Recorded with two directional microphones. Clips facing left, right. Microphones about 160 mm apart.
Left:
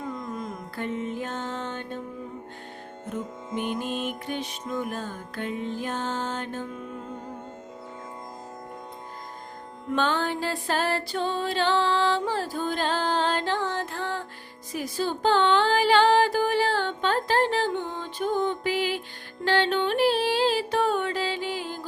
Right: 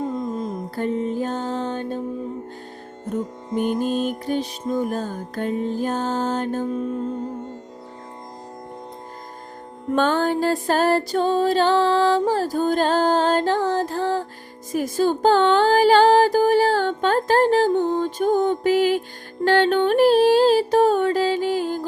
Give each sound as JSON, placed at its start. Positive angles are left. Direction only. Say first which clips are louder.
{"t": 0.0, "sound": "music", "louder": "right 8 dB", "side_deg": -25}
{"t": 3.1, "sound": "music", "louder": "right 7 dB", "side_deg": -40}
{"t": 9.9, "sound": "music", "louder": "right 6 dB", "side_deg": -45}
{"t": 14.7, "sound": "music", "louder": "right 8 dB", "side_deg": -45}